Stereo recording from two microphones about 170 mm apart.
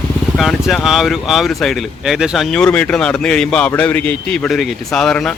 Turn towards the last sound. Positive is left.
turn(degrees=5)  # may be behind; listen again after turning